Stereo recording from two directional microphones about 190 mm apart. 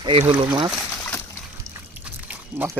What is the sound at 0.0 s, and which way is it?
Speech, 30° right (ahead or behind).